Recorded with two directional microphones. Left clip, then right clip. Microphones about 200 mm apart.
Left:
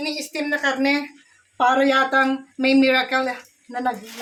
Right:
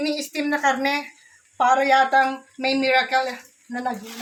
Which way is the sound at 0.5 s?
25° left (ahead or behind).